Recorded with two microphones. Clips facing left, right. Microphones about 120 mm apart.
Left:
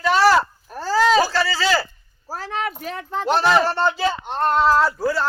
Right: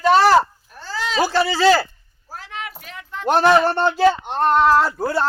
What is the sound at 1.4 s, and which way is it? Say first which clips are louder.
Speech: right 3 dB; 20° right (ahead or behind).